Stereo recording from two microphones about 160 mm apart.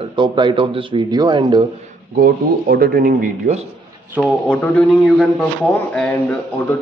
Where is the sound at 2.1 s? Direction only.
65° right (ahead or behind).